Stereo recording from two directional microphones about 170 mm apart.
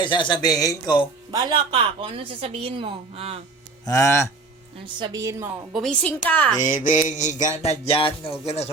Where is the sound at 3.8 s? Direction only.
15° left (ahead or behind).